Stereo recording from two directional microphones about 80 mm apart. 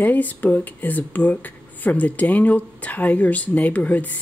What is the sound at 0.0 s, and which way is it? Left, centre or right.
Speech, left.